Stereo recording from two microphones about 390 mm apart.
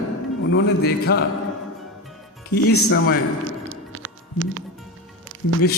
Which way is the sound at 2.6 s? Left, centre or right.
Left.